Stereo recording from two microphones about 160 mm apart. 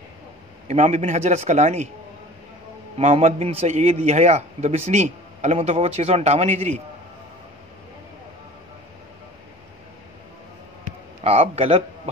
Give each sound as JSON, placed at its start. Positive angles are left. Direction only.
{"t": 0.7, "sound": "a man's voice", "side_deg": -45}
{"t": 3.0, "sound": "a man's voice", "side_deg": -50}
{"t": 11.2, "sound": "a man's voice", "side_deg": -40}